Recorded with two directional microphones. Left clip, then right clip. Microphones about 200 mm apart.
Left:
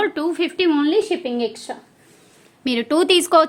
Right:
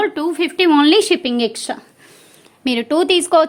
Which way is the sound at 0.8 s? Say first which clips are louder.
Right 6 dB; 50° right (ahead or behind).